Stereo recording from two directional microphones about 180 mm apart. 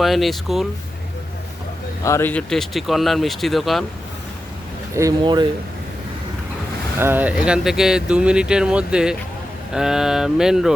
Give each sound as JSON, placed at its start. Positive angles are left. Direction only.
{"t": 0.0, "sound": "speech", "side_deg": 0}
{"t": 2.0, "sound": "speech", "side_deg": 15}
{"t": 4.9, "sound": "speech", "side_deg": -20}
{"t": 7.0, "sound": "speech", "side_deg": -10}